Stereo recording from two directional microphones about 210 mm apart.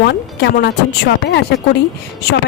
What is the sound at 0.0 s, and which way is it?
Speech, 55° left (ahead or behind).